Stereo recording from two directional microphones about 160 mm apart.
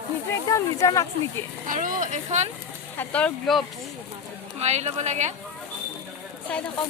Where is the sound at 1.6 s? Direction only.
60° right (ahead or behind).